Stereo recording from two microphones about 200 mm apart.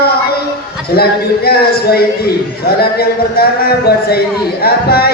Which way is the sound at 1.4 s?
50° left (ahead or behind).